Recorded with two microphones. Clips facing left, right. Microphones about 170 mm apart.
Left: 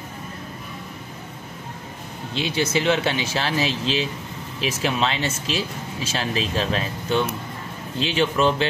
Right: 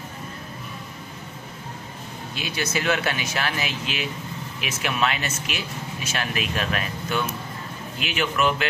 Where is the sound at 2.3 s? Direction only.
25° left (ahead or behind).